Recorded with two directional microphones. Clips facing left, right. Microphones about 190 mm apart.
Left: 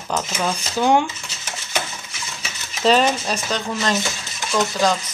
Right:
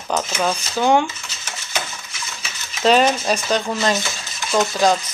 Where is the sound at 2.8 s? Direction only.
Centre (ahead or behind).